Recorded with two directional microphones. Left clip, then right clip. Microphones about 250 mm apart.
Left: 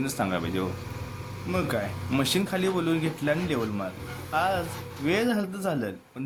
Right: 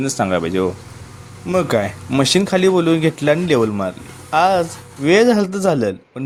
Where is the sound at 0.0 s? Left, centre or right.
Left.